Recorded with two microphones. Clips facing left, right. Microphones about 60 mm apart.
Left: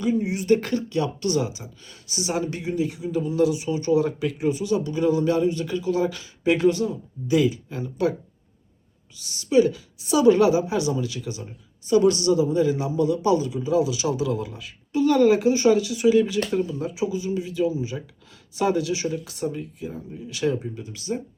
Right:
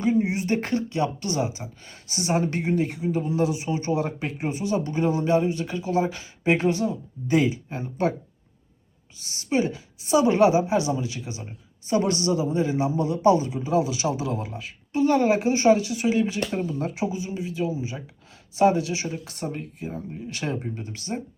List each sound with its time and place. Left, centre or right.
0.0 s speech: right
9.1 s speech: right
16.6 s speech: right
17.1 s speech: right